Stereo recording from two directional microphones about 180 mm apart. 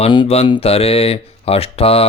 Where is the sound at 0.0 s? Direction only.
30° left (ahead or behind).